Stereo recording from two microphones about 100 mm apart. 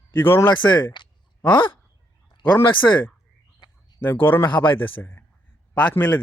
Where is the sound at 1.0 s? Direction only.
50° left (ahead or behind).